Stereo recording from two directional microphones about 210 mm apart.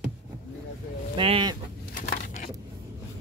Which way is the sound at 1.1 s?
25° right (ahead or behind).